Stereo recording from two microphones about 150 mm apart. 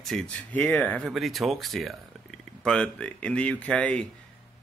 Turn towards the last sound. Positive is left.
turn(degrees=10)  # may be behind; listen again after turning